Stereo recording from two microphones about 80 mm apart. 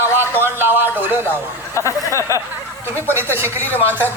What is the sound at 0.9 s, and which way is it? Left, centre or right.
Speech, right.